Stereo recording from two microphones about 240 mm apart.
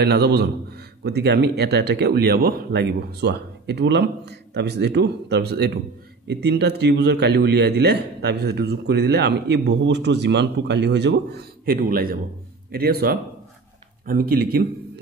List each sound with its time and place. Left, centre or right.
0.0 s a man's voice: right